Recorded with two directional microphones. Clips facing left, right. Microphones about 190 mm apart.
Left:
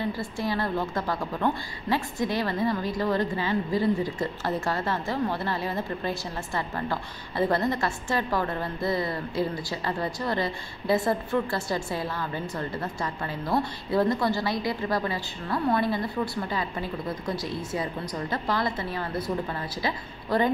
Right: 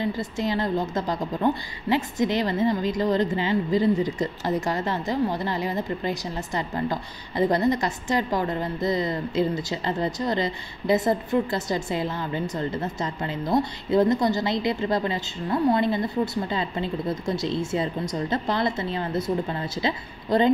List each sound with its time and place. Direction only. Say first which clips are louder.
0.0 s a woman's voice: right 3 dB; 20° right (ahead or behind)